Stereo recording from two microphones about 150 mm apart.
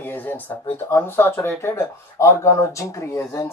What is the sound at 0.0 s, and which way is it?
A man's voice, 10° left (ahead or behind).